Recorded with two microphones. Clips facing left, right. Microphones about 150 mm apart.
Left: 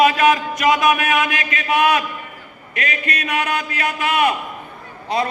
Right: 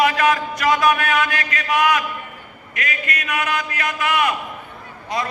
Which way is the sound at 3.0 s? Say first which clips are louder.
Left 2 dB; 30° left (ahead or behind).